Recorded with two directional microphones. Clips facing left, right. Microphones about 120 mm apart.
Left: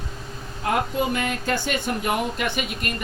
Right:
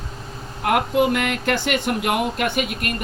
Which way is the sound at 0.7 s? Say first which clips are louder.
Right 5 dB; 85° right.